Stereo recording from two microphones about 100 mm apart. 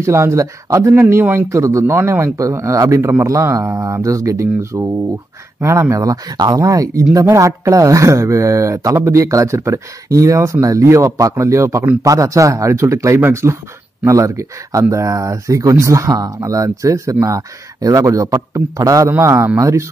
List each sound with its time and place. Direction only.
0.0 s speech: 30° right (ahead or behind)